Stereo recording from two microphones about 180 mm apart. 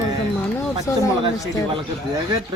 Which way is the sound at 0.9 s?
15° left (ahead or behind).